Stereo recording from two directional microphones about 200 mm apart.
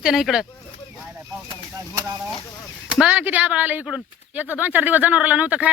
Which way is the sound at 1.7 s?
20° right (ahead or behind).